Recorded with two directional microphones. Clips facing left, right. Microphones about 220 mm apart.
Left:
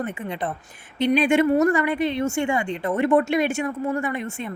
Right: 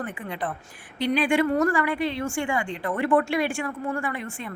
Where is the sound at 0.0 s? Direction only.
25° left (ahead or behind).